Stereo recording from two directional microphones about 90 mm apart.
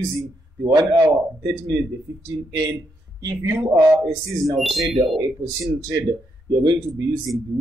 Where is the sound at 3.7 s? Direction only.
35° right (ahead or behind).